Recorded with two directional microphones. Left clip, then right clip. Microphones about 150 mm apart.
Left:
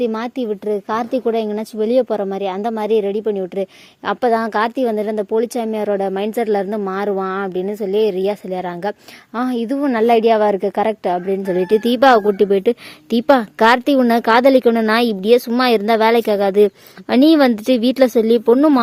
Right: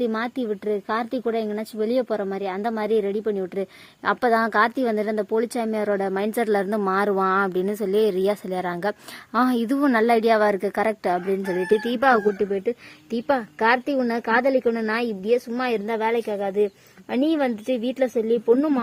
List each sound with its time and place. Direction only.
0.0 s a woman's voice: 20° left (ahead or behind); by 9.9 s centre (ahead or behind)
9.9 s a woman's voice: 15° left (ahead or behind)
11.5 s speech: 40° left (ahead or behind)